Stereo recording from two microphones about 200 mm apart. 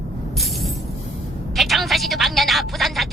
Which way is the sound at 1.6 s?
Centre (ahead or behind).